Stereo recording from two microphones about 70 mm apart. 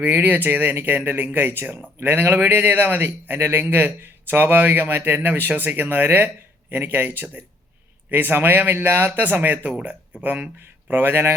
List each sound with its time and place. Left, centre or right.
0.0 s a man's voice: right
8.1 s a man's voice: right